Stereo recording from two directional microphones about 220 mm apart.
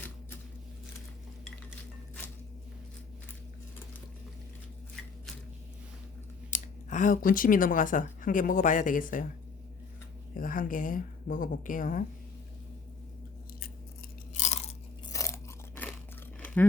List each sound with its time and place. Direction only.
6.5 s speech: 35° left (ahead or behind)
10.3 s speech: 40° left (ahead or behind)
14.3 s chewing: 30° left (ahead or behind)
15.1 s crunch: 15° left (ahead or behind)